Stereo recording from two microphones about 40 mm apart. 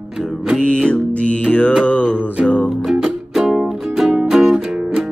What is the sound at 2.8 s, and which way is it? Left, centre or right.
Music, centre.